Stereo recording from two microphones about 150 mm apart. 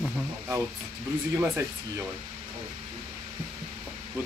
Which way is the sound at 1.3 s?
15° right (ahead or behind).